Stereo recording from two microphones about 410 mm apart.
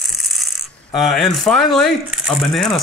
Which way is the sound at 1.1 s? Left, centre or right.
Centre.